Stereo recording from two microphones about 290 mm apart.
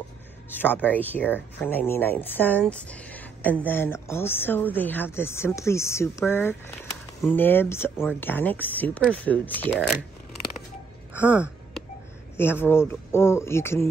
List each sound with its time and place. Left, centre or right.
0.5 s speech: centre
11.1 s speech: centre